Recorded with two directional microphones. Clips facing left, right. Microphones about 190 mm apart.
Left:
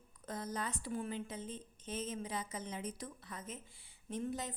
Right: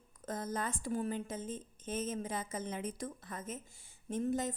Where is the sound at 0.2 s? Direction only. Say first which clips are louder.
Right 3 dB; 45° right (ahead or behind).